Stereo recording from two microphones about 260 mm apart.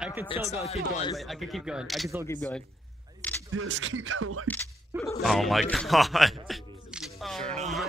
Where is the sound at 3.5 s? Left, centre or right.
Right.